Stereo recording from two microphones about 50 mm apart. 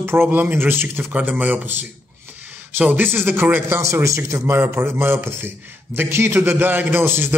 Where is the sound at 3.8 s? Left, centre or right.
Right.